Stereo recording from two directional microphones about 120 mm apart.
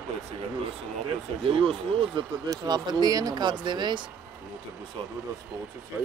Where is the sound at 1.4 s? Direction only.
50° right (ahead or behind).